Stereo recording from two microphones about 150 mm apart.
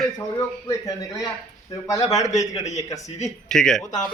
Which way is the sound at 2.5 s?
50° left (ahead or behind).